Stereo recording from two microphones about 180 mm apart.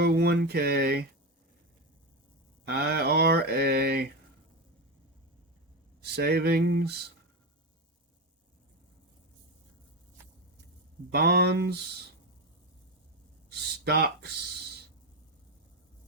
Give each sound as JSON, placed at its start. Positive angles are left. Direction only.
{"t": 0.0, "sound": "speech", "side_deg": -65}
{"t": 2.6, "sound": "speech", "side_deg": -60}
{"t": 6.0, "sound": "speech", "side_deg": -65}
{"t": 11.1, "sound": "speech", "side_deg": -60}
{"t": 13.6, "sound": "a sound", "side_deg": -65}